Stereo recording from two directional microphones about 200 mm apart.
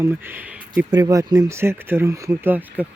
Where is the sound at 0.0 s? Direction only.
10° right (ahead or behind).